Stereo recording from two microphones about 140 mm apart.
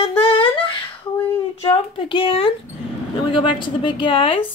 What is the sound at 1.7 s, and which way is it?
A woman's voice, 35° left (ahead or behind).